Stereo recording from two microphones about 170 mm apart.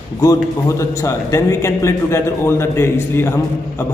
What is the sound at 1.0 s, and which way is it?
A man's voice, 15° left (ahead or behind).